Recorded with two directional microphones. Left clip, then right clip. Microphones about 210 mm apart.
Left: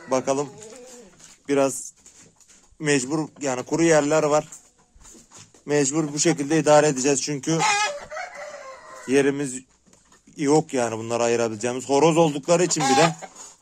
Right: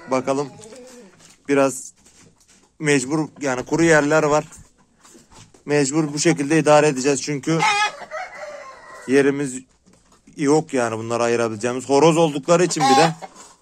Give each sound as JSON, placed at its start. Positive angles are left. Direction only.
{"t": 0.1, "sound": "speech", "side_deg": 15}
{"t": 5.7, "sound": "speech", "side_deg": 10}
{"t": 9.0, "sound": "speech", "side_deg": 15}